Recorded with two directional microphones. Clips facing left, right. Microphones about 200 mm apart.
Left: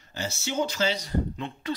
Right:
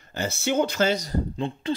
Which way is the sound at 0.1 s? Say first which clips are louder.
Right 6 dB; 55° right (ahead or behind).